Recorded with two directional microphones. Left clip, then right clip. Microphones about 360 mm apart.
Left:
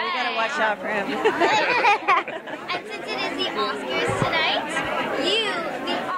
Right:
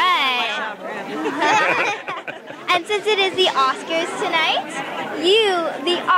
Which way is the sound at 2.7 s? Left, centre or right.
Right.